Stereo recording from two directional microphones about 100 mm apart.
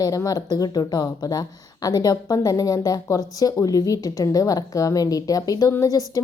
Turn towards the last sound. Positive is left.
turn(degrees=35)  # may be behind; listen again after turning